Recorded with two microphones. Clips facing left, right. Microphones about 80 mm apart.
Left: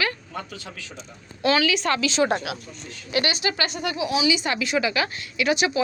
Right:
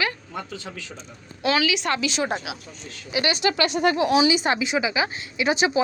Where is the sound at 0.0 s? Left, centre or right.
Right.